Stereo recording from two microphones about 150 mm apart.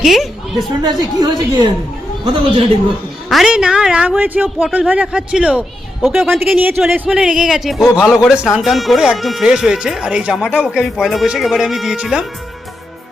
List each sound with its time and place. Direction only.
0.0 s a sound: centre (ahead or behind)
0.8 s a woman's voice: 25° right (ahead or behind)
3.2 s speech: centre (ahead or behind)